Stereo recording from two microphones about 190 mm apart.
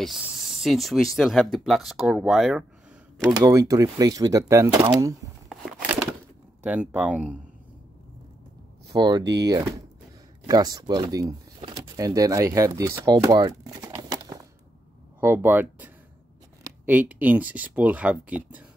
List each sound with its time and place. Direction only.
0.0 s speech: centre (ahead or behind)
3.3 s speech: 15° right (ahead or behind)
5.5 s a sound: 5° right (ahead or behind)
6.6 s speech: 5° right (ahead or behind)
8.8 s speech: 20° right (ahead or behind)
9.2 s speech: 65° right (ahead or behind)
10.4 s speech: 20° right (ahead or behind)